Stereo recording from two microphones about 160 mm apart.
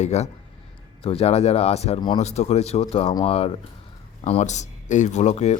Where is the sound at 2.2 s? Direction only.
45° left (ahead or behind).